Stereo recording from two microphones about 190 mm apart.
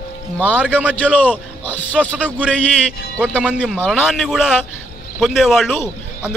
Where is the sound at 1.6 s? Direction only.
10° left (ahead or behind).